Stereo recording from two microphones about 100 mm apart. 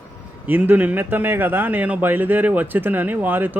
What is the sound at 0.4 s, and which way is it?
Speech, 20° right (ahead or behind).